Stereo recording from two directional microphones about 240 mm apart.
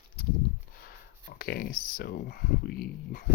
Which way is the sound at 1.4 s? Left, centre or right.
Left.